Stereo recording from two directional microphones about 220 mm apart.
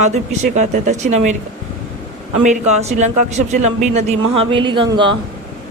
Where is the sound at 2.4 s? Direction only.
30° right (ahead or behind).